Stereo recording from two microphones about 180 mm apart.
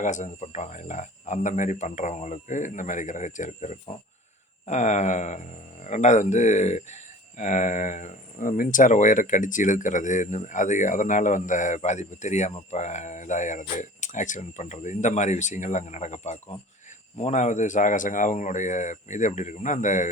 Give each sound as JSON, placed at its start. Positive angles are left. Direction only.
{"t": 0.0, "sound": "speech", "side_deg": 45}